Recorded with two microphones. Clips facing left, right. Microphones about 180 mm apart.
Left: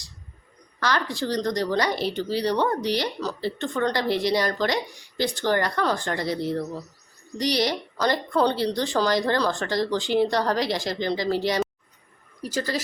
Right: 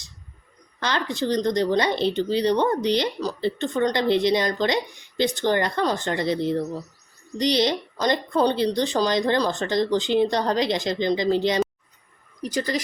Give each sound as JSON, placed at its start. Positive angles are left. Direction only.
{"t": 0.8, "sound": "speech", "side_deg": -20}